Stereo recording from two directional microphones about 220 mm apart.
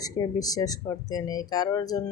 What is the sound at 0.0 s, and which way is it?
Speech, 15° left (ahead or behind).